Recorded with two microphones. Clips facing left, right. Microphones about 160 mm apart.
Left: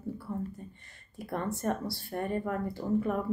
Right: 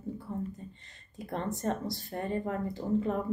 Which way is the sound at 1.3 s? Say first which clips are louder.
Left 1 dB; 20° right (ahead or behind).